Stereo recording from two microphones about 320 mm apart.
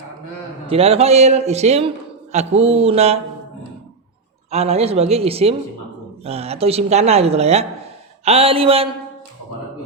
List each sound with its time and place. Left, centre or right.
0.7 s speech: centre
4.5 s speech: centre